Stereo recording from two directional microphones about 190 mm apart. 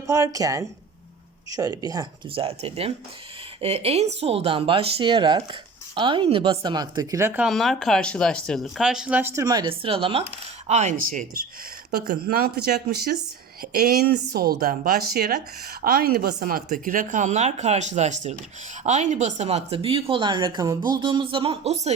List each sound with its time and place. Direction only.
0.3 s speech: 20° right (ahead or behind)
7.4 s speech: centre (ahead or behind); by 11.3 s 45° right (ahead or behind)
11.9 s speech: 55° right (ahead or behind); by 21.9 s 35° right (ahead or behind)